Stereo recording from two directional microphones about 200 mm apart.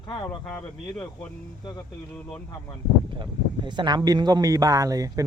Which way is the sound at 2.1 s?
10° left (ahead or behind).